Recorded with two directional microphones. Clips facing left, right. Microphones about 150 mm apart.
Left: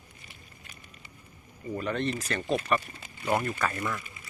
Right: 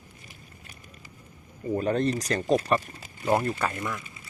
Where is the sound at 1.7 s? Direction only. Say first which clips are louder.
Right 5 dB; 40° right (ahead or behind).